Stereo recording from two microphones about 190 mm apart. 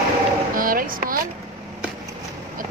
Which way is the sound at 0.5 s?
50° right (ahead or behind).